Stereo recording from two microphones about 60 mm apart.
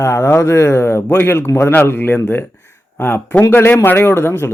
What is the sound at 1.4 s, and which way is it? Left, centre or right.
Speech, left.